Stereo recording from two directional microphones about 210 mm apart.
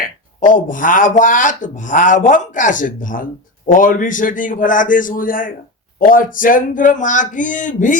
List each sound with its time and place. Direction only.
0.0 s speech: 40° left (ahead or behind)